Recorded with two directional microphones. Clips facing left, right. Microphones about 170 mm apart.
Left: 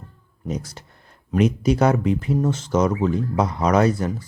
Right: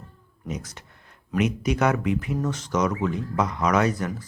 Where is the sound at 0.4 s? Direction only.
30° left (ahead or behind).